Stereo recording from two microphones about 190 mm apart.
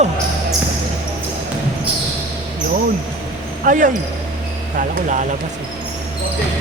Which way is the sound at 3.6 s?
45° right (ahead or behind).